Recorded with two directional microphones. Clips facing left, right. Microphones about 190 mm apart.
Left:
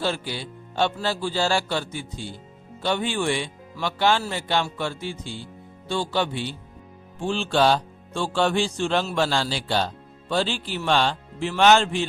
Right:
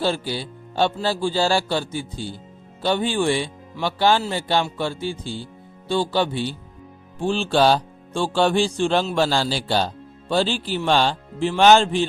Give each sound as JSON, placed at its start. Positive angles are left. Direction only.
{"t": 0.0, "sound": "speech", "side_deg": -30}